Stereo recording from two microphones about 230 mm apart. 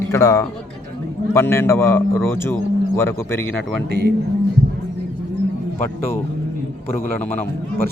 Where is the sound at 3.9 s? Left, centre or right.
Right.